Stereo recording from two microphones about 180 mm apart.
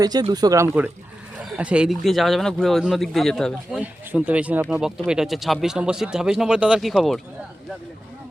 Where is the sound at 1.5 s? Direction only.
5° right (ahead or behind).